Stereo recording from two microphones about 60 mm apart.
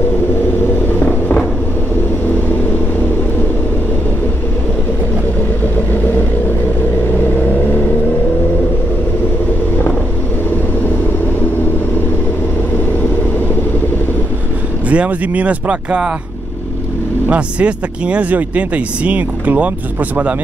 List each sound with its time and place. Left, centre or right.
0.8 s vehicle: left
14.9 s speech: right
17.3 s speech: right